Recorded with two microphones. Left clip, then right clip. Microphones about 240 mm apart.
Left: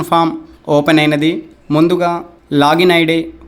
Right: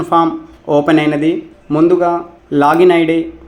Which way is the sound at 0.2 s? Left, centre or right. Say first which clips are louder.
Right 1 dB; left.